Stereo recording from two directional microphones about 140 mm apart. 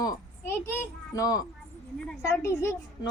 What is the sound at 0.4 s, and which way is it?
A child's voice, 15° left (ahead or behind).